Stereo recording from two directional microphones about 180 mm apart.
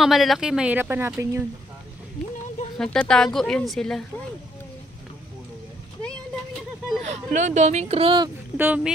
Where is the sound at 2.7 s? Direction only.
5° left (ahead or behind).